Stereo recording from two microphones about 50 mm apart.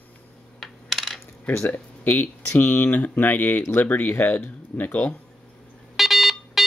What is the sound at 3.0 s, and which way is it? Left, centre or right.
Speech, left.